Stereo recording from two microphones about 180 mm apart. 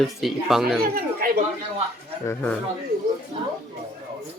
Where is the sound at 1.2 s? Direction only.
55° right (ahead or behind).